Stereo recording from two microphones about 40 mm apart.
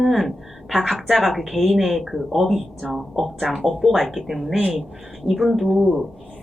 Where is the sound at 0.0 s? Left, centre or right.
Centre.